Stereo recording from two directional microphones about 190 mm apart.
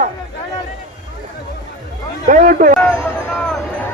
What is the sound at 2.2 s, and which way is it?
Speech, 45° right (ahead or behind).